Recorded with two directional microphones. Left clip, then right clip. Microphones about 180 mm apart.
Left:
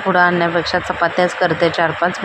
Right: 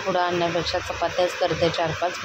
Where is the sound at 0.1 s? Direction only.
15° left (ahead or behind).